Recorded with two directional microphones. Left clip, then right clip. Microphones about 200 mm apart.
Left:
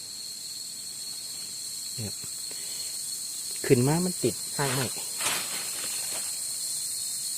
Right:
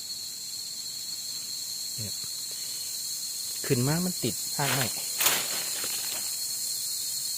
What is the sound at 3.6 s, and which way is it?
Speech, 30° left (ahead or behind).